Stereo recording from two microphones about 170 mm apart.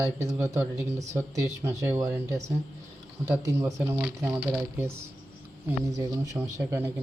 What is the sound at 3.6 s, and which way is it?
Speech, 15° right (ahead or behind).